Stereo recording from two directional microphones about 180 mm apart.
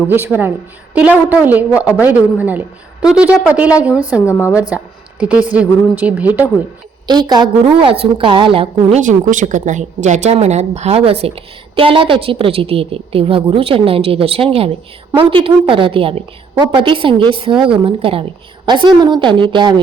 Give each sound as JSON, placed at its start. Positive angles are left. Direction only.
{"t": 0.1, "sound": "a woman's voice", "side_deg": -10}
{"t": 4.3, "sound": "a woman's voice", "side_deg": 15}
{"t": 5.5, "sound": "a woman's voice", "side_deg": -10}
{"t": 7.1, "sound": "a woman's voice", "side_deg": -25}
{"t": 9.0, "sound": "a woman's voice", "side_deg": -45}